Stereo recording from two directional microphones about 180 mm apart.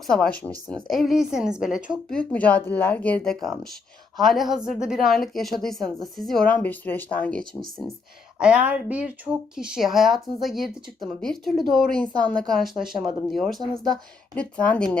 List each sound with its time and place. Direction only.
0.1 s a woman's voice: 5° left (ahead or behind)
8.4 s a woman's voice: 5° right (ahead or behind)